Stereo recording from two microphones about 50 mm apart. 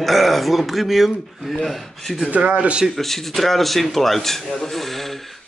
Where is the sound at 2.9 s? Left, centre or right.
Centre.